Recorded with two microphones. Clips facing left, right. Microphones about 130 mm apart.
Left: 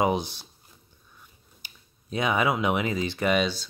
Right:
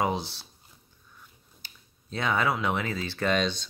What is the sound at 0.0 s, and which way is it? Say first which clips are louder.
Speech: left 4 dB; 15° left (ahead or behind).